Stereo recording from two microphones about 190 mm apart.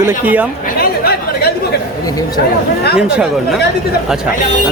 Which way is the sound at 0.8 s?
55° left (ahead or behind).